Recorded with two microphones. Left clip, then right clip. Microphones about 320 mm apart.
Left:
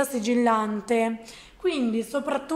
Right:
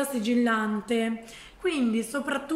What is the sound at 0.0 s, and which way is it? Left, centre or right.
A woman's voice, centre.